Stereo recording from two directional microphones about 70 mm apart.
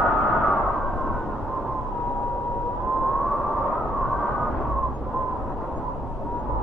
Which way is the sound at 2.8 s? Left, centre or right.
Centre.